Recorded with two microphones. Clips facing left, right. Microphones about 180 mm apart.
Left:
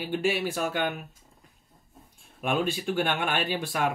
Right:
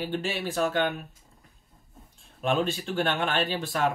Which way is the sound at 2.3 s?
10° left (ahead or behind).